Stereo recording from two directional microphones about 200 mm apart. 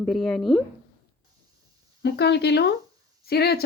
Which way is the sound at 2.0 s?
55° left (ahead or behind).